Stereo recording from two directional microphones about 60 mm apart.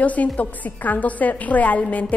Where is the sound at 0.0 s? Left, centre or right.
Left.